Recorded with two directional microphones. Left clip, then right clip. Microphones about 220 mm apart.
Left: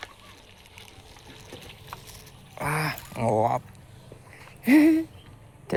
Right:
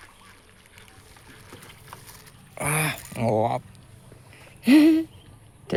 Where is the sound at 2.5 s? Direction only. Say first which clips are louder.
Right 2 dB; 30° right (ahead or behind).